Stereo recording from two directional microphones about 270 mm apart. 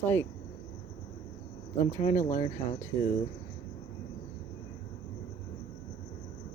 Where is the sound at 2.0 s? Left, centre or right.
Left.